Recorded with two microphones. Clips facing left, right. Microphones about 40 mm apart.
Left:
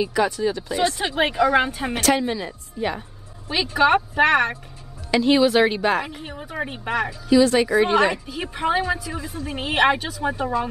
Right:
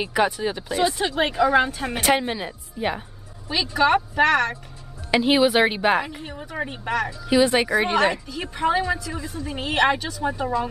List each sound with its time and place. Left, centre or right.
0.1 s a woman's voice: right
0.7 s speech: centre
2.0 s a woman's voice: centre
3.7 s speech: centre
5.1 s a woman's voice: centre
6.0 s speech: centre
7.2 s a woman's voice: right
8.3 s speech: centre